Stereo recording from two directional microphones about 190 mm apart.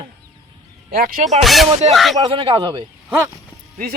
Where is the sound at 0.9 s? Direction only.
50° right (ahead or behind).